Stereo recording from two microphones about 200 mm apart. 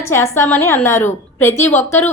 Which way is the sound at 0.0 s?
15° left (ahead or behind).